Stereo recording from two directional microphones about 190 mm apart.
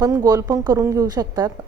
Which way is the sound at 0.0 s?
15° right (ahead or behind).